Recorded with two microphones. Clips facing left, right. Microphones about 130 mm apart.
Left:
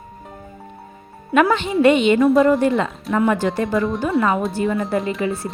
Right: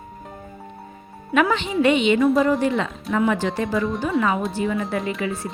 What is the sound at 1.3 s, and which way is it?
A woman's voice, 45° left (ahead or behind).